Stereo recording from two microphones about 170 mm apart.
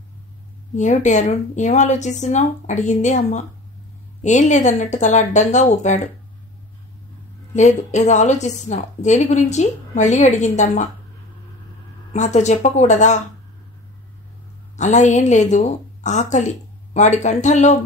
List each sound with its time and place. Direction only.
0.7 s a woman's voice: 45° left (ahead or behind)
7.5 s a woman's voice: 45° left (ahead or behind)
12.1 s a woman's voice: 40° left (ahead or behind)
14.8 s a woman's voice: 45° left (ahead or behind)